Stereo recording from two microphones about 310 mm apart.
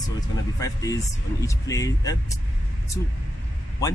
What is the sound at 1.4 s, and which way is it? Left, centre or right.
Speech, centre.